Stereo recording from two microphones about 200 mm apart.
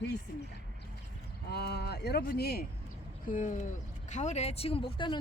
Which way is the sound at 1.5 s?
55° left (ahead or behind).